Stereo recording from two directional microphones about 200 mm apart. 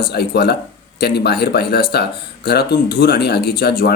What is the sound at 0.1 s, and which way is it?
Speech, 55° left (ahead or behind).